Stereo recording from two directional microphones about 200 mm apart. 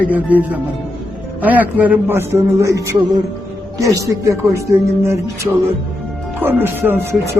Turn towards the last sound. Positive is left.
turn(degrees=-10)  # may be behind; listen again after turning